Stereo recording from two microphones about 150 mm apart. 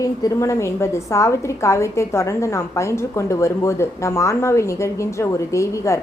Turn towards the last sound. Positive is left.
turn(degrees=20)  # may be behind; listen again after turning